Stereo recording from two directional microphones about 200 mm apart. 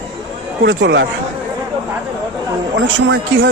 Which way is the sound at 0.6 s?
60° right (ahead or behind).